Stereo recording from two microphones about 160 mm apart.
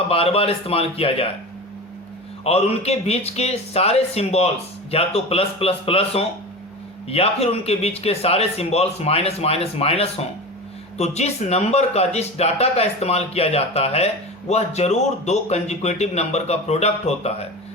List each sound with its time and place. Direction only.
0.1 s a man's voice: 35° left (ahead or behind)
2.4 s a man's voice: 40° left (ahead or behind)